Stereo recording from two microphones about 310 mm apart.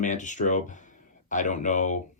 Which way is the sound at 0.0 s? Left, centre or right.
Left.